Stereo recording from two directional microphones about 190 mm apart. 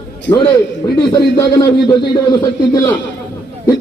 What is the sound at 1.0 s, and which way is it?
A man's voice, 20° left (ahead or behind).